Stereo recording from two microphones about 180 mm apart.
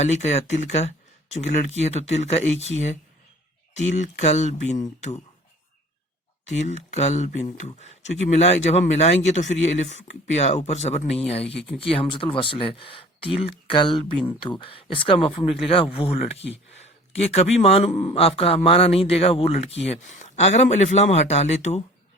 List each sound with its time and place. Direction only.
0.0 s a man's voice: 40° left (ahead or behind)
3.9 s a man's voice: 40° left (ahead or behind)
6.7 s a man's voice: 40° left (ahead or behind)